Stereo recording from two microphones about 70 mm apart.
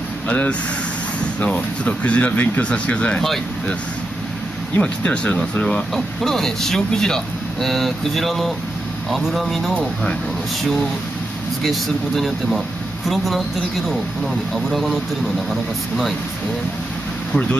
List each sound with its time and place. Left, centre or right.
0.3 s speech: centre
4.7 s speech: centre
11.6 s speech: centre